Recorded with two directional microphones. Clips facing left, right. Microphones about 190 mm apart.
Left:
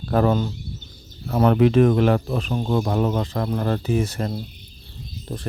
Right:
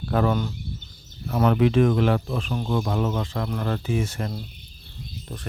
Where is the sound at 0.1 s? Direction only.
40° left (ahead or behind).